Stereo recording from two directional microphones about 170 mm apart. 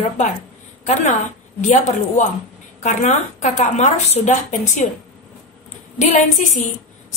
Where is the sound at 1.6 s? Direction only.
45° left (ahead or behind).